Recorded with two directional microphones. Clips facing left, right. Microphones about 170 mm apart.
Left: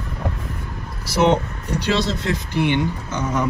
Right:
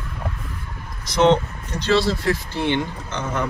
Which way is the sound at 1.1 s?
5° left (ahead or behind).